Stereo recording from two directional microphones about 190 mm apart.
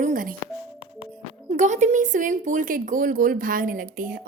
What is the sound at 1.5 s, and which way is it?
Speech, 40° right (ahead or behind).